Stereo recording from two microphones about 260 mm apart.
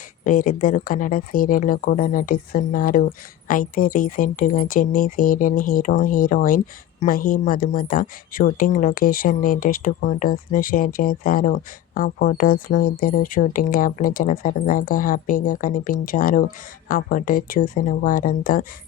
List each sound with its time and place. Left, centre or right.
0.3 s a woman's voice: left